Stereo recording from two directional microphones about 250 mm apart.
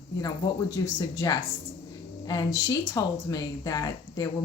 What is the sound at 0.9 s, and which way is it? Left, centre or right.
Speech, centre.